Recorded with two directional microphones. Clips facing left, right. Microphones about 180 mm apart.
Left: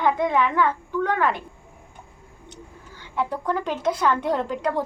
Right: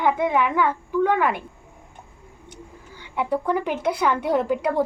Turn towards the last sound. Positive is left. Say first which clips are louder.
# right 3 dB
turn(degrees=-10)  # may be behind; listen again after turning